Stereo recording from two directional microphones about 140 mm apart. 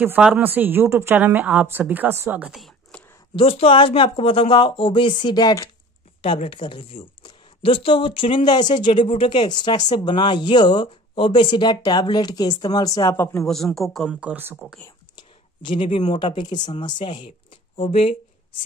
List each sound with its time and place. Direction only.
0.0 s a woman's voice: 10° right (ahead or behind)
3.3 s speech: 45° left (ahead or behind); by 5.7 s 25° left (ahead or behind)
6.2 s speech: 40° left (ahead or behind); by 13.5 s 20° left (ahead or behind)
13.5 s a man's voice: centre (ahead or behind)
14.3 s a woman's voice: 15° right (ahead or behind)
15.1 s a sound: 35° left (ahead or behind)
16.2 s speech: 35° left (ahead or behind)